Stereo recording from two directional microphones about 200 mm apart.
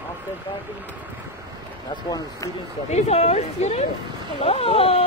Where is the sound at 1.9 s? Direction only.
20° left (ahead or behind).